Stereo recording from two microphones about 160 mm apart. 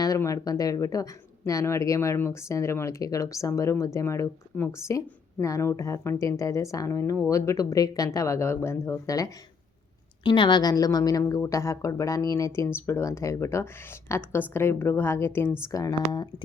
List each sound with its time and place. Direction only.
0.0 s speech: 20° left (ahead or behind)